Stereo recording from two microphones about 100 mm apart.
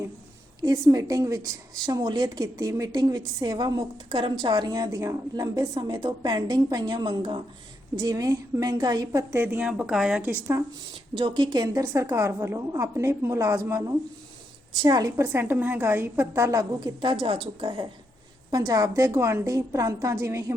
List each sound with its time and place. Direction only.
0.6 s a woman's voice: 40° right (ahead or behind)
7.9 s a woman's voice: 35° right (ahead or behind)
9.3 s speech: 20° right (ahead or behind)
11.2 s a woman's voice: 50° right (ahead or behind); by 13.9 s 30° right (ahead or behind)
14.8 s a woman's voice: 45° right (ahead or behind)
15.3 s a woman's voice: 20° right (ahead or behind)
17.0 s a woman's voice: 55° right (ahead or behind)
18.5 s a woman's voice: 40° right (ahead or behind)